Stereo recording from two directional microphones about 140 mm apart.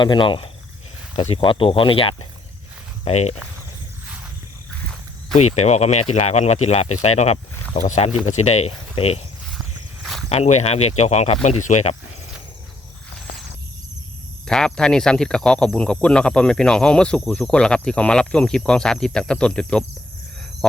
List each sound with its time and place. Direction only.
0.0 s speech: 35° left (ahead or behind); by 3.3 s 50° left (ahead or behind)
5.4 s speech: 55° left (ahead or behind)
10.2 s speech: 50° left (ahead or behind)
14.4 s speech: 5° left (ahead or behind)